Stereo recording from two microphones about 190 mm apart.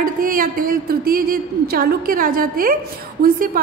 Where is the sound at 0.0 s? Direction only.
50° right (ahead or behind).